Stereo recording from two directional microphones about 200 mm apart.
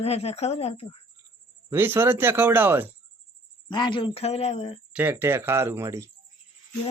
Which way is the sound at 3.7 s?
25° left (ahead or behind).